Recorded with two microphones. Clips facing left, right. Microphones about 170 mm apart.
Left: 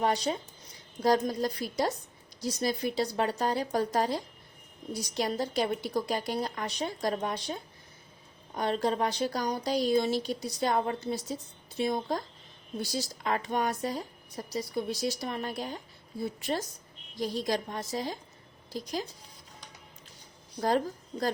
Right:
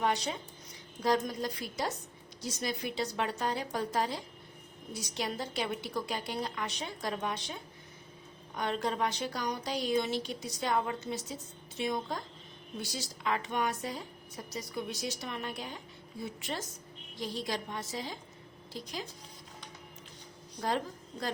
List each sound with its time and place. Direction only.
0.0 s a woman's voice: 35° left (ahead or behind)
20.6 s a woman's voice: 40° left (ahead or behind)